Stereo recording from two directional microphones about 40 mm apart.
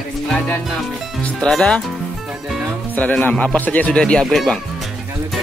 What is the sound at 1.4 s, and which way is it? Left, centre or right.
Speech, centre.